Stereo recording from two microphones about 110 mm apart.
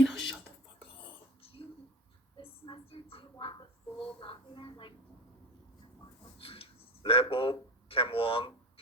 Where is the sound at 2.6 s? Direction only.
55° left (ahead or behind).